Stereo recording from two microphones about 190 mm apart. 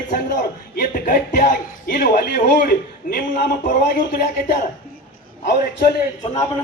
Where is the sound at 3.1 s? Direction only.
45° left (ahead or behind).